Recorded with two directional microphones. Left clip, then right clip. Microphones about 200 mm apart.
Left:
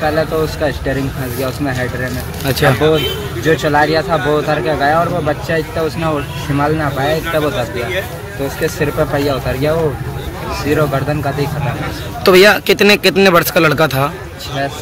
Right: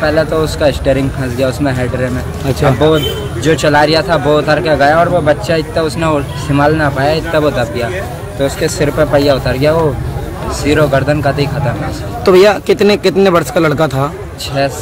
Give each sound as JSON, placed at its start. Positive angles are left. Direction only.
{"t": 0.0, "sound": "speech", "side_deg": -20}
{"t": 2.8, "sound": "speech", "side_deg": -20}
{"t": 8.6, "sound": "speech", "side_deg": -20}
{"t": 12.3, "sound": "speech", "side_deg": 0}